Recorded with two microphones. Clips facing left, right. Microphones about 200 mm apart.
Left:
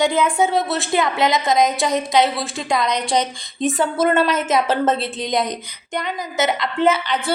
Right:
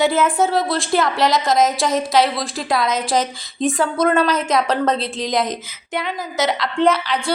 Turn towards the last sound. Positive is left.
turn(degrees=0)  # may be behind; listen again after turning